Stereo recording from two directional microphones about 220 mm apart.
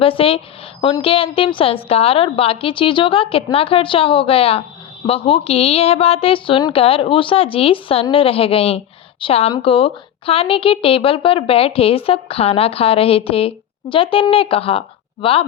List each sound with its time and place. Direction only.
0.0 s a woman's voice: 25° left (ahead or behind)